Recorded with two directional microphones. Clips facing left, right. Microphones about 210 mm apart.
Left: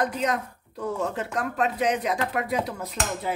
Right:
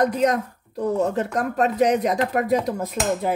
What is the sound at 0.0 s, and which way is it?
Speech, 40° right (ahead or behind).